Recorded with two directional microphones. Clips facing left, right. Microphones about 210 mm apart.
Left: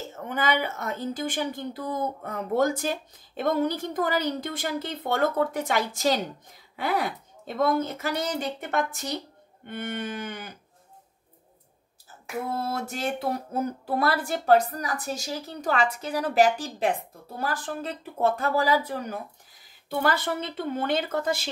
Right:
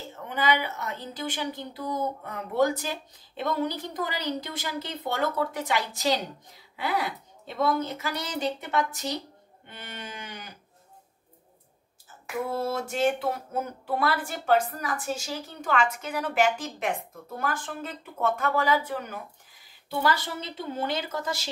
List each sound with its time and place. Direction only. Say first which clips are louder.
0.1 s a woman's voice: even; 45° left (ahead or behind)
12.4 s a woman's voice: right 1 dB; 40° left (ahead or behind)
19.9 s a woman's voice: left 2 dB; 55° left (ahead or behind)